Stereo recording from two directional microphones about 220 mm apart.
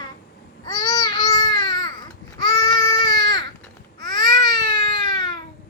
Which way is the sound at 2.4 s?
20° left (ahead or behind).